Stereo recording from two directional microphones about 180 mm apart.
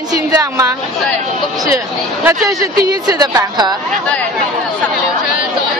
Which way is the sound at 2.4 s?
20° right (ahead or behind).